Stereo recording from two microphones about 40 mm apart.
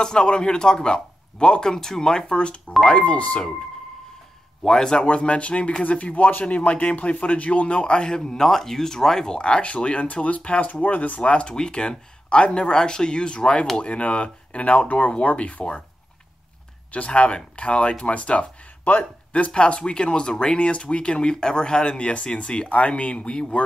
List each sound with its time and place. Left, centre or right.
0.0 s speech: centre
4.6 s speech: centre
5.0 s speech: left
16.9 s speech: left